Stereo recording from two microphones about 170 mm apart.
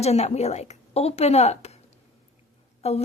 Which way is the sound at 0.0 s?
40° left (ahead or behind).